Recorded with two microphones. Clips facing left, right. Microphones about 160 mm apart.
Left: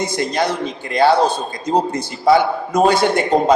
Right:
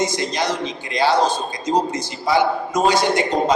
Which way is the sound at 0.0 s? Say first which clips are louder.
Left 2 dB; 55° left (ahead or behind).